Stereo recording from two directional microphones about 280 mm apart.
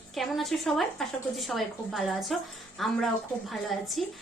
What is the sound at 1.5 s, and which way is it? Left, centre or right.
A woman's voice, centre.